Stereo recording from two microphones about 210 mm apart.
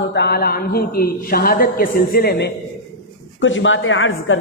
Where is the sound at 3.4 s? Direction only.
65° left (ahead or behind).